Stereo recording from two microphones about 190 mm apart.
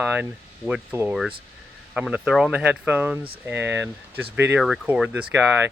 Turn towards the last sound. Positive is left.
turn(degrees=-10)  # may be behind; listen again after turning